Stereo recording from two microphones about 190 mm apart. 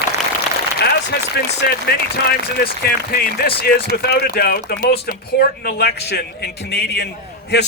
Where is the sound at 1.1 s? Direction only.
55° left (ahead or behind).